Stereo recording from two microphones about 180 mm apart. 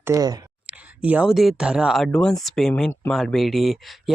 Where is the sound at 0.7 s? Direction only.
10° right (ahead or behind).